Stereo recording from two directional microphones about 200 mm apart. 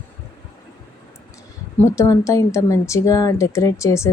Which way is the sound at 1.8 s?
15° left (ahead or behind).